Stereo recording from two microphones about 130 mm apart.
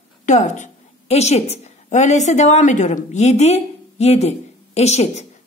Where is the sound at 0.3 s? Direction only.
65° left (ahead or behind).